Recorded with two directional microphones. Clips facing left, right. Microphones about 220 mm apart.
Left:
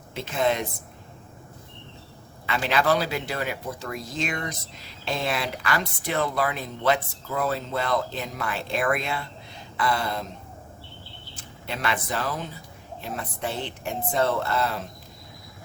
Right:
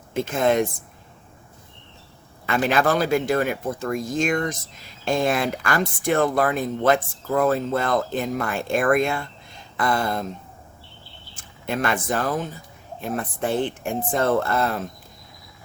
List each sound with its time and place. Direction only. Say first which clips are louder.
0.1 s speech: right 5 dB; 50° right (ahead or behind)
2.5 s speech: right 3 dB; 50° right (ahead or behind)
11.3 s speech: right 8 dB; 50° right (ahead or behind)